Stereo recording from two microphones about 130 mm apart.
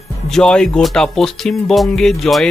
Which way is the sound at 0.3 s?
5° left (ahead or behind).